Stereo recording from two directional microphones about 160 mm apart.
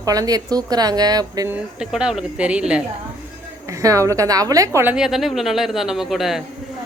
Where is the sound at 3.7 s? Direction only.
20° right (ahead or behind).